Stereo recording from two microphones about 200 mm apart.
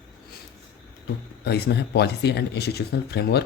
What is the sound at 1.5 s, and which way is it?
Speech, 55° left (ahead or behind).